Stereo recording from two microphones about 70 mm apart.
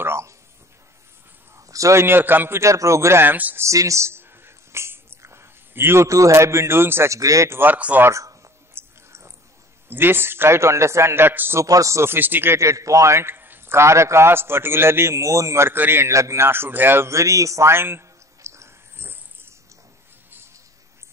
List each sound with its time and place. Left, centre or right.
0.0 s a sound: right
1.7 s a sound: right
2.0 s a man's voice: right
2.6 s a man's voice: right
3.3 s speech: right
3.5 s a sound: right
7.2 s speech: right
7.4 s speech: right
8.1 s a sound: right
9.8 s a man's voice: right
11.6 s a man's voice: right
12.5 s a man's voice: right
16.1 s speech: right